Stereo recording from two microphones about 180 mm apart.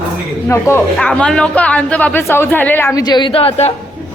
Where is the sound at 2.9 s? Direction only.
20° left (ahead or behind).